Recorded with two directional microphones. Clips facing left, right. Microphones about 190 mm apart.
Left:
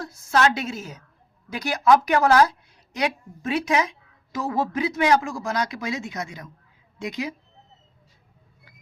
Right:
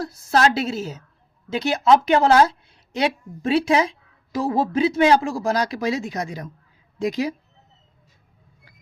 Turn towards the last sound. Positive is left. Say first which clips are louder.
# right 7 dB
turn(degrees=-35)  # may be behind; listen again after turning